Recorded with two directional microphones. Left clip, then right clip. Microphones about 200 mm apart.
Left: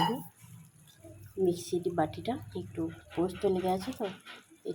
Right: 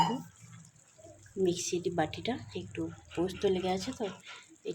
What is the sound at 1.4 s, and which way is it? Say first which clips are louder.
Speech: left 1 dB; centre (ahead or behind).